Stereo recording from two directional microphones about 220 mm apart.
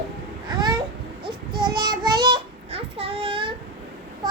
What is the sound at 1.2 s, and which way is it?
Child singing, 20° right (ahead or behind).